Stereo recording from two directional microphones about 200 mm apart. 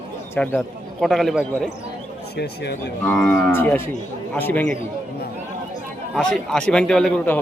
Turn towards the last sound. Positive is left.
turn(degrees=5)  # may be behind; listen again after turning